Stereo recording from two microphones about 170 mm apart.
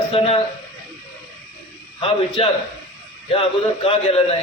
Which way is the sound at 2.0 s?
35° left (ahead or behind).